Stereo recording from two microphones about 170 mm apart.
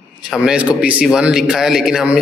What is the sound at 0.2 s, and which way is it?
A man's voice, 5° right (ahead or behind).